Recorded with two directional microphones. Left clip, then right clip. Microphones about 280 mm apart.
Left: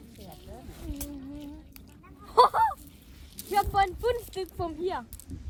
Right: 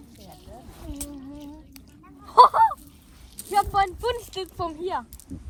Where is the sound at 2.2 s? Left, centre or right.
Centre.